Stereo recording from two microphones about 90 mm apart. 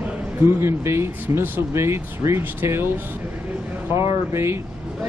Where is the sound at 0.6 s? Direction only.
30° right (ahead or behind).